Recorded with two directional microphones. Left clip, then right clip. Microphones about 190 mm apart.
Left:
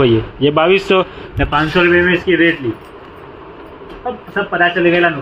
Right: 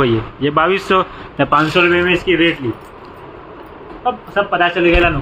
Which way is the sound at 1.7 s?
Centre (ahead or behind).